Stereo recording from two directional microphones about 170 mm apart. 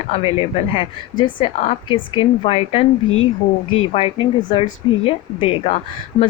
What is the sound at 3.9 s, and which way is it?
Speech, 35° left (ahead or behind).